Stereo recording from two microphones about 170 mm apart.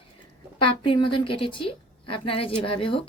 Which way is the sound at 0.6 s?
30° left (ahead or behind).